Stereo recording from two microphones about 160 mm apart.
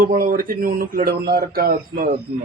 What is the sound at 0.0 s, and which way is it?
Speech, 55° right (ahead or behind).